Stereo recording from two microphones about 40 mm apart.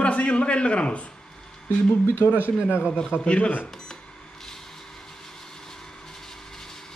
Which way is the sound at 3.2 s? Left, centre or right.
Left.